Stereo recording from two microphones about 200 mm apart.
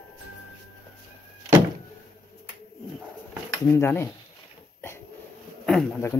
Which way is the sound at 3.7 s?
15° left (ahead or behind).